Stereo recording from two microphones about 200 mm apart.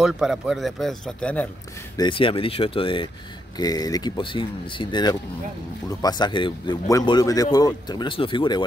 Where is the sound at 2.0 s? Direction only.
25° left (ahead or behind).